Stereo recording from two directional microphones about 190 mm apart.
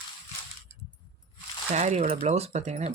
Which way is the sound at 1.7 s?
35° right (ahead or behind).